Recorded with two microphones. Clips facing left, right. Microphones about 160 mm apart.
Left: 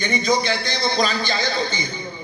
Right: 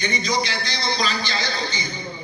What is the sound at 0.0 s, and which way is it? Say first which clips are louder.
A man's voice: left 4 dB; 50° left (ahead or behind).